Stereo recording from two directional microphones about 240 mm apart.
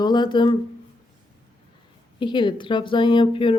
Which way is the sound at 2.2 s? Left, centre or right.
Centre.